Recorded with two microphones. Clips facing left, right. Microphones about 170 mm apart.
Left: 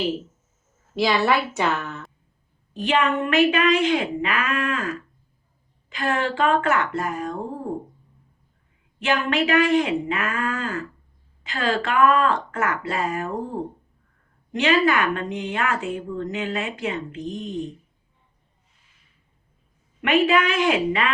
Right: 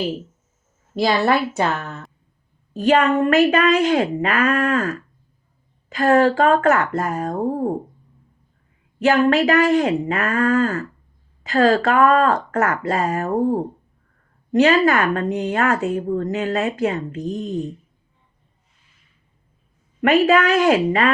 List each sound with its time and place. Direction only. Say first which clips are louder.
0.9 s a woman's voice: right 3 dB; 40° right (ahead or behind)
2.8 s speech: right 6 dB; 40° right (ahead or behind)
9.0 s speech: right 7 dB; 40° right (ahead or behind)
20.0 s speech: right 4 dB; 40° right (ahead or behind)